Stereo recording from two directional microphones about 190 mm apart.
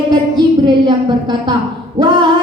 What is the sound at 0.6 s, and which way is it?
A woman's voice, 25° right (ahead or behind).